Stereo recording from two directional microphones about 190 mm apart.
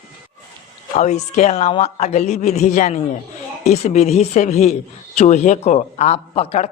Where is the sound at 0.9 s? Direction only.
35° left (ahead or behind).